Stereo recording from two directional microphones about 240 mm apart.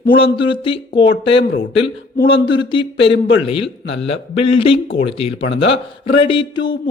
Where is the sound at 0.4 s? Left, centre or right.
Left.